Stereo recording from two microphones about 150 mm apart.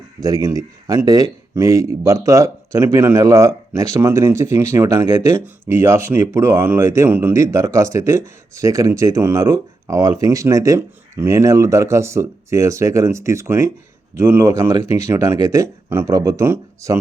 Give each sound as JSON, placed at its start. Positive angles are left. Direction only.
{"t": 0.2, "sound": "a man's voice", "side_deg": -25}